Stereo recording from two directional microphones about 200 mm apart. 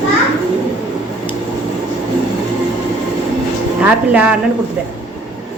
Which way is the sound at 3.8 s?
5° right (ahead or behind).